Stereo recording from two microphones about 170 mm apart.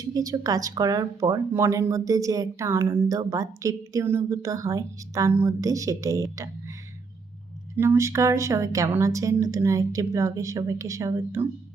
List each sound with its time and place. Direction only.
0.0 s speech: 20° right (ahead or behind)
7.8 s a woman's voice: 15° right (ahead or behind)